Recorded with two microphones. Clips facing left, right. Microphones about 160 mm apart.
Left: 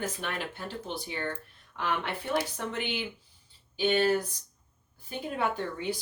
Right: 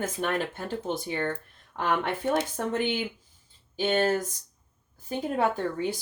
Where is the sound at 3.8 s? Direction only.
45° right (ahead or behind).